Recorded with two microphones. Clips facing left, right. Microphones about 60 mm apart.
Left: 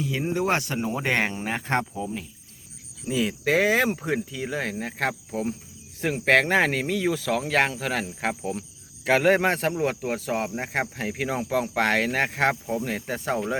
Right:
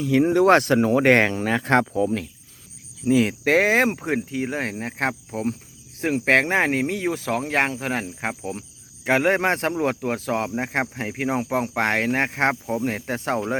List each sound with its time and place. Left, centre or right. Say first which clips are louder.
0.0 s speech: right 9 dB; right
3.1 s speech: right 5 dB; right
10.2 s speech: right 3 dB; right
11.2 s speech: right 3 dB; right